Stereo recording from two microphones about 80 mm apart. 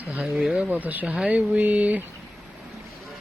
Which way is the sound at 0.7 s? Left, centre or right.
Right.